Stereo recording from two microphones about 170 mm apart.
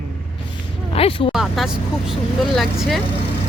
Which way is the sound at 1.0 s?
35° left (ahead or behind).